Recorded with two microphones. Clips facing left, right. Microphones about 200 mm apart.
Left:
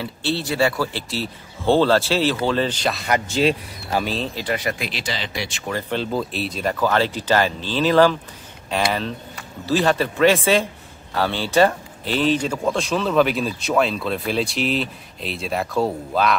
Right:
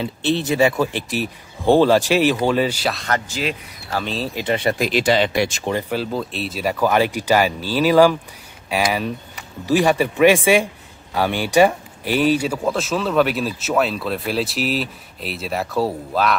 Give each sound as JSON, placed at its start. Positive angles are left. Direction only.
{"t": 0.0, "sound": "speech", "side_deg": -20}
{"t": 3.3, "sound": "speech", "side_deg": 25}
{"t": 4.0, "sound": "speech", "side_deg": 0}
{"t": 4.4, "sound": "speech", "side_deg": -25}
{"t": 4.7, "sound": "speech", "side_deg": -45}
{"t": 5.9, "sound": "speech", "side_deg": -5}